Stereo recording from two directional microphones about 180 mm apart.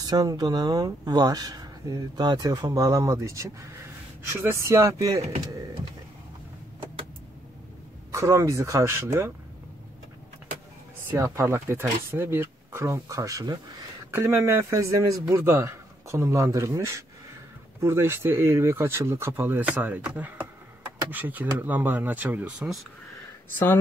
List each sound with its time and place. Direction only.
0.0 s speech: 20° right (ahead or behind)
8.1 s speech: 15° right (ahead or behind)
11.1 s speech: 15° right (ahead or behind)